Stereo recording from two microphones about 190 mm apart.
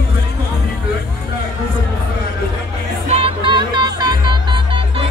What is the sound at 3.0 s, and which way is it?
Music, 30° right (ahead or behind).